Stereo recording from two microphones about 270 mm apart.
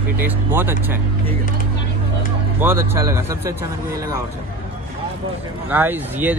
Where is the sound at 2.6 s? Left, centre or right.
Centre.